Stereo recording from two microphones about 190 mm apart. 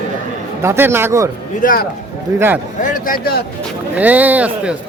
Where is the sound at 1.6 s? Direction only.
50° left (ahead or behind).